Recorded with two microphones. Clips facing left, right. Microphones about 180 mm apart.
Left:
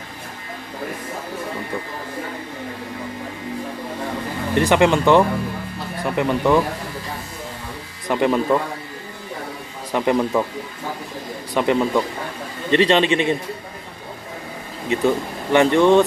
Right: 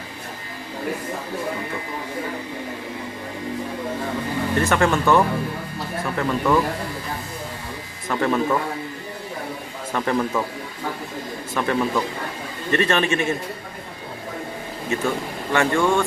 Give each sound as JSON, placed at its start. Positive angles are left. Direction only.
{"t": 4.6, "sound": "a man's voice", "side_deg": 15}
{"t": 8.1, "sound": "a man's voice", "side_deg": 15}
{"t": 9.9, "sound": "a man's voice", "side_deg": 20}
{"t": 11.5, "sound": "a man's voice", "side_deg": 20}
{"t": 14.9, "sound": "speech", "side_deg": 20}